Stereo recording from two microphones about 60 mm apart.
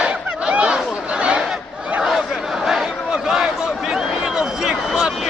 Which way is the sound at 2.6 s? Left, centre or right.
Centre.